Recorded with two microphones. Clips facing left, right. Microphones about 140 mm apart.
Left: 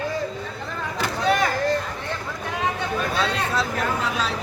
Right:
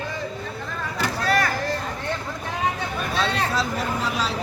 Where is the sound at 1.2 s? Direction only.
20° left (ahead or behind).